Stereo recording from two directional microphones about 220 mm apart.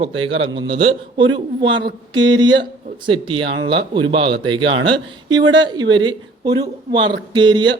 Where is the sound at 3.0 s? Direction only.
25° right (ahead or behind).